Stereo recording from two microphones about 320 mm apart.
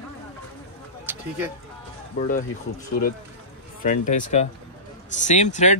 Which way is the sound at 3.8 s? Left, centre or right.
Left.